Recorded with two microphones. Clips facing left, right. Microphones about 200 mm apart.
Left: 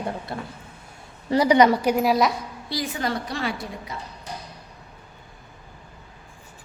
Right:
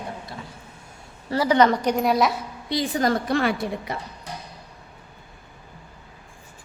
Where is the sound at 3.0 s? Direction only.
50° right (ahead or behind).